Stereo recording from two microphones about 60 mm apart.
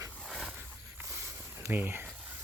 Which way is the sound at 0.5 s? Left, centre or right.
Right.